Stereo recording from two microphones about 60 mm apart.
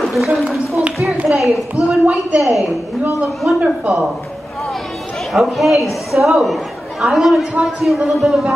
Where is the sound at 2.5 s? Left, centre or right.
Centre.